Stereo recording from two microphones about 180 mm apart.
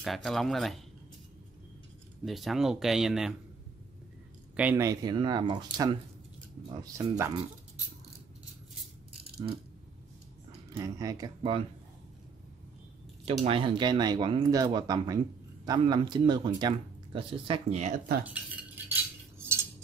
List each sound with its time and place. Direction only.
0.0 s speech: centre (ahead or behind)
2.2 s speech: centre (ahead or behind)
4.6 s speech: 10° right (ahead or behind)
10.7 s speech: 20° right (ahead or behind)
13.4 s speech: 30° right (ahead or behind)
18.2 s cutlery: 10° right (ahead or behind)